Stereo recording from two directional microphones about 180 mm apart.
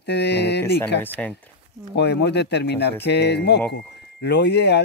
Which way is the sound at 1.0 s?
10° left (ahead or behind).